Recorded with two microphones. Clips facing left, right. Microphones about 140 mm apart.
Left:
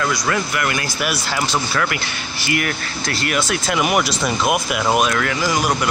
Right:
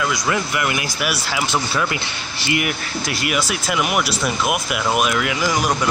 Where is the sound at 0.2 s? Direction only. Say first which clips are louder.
Even; 20° right (ahead or behind).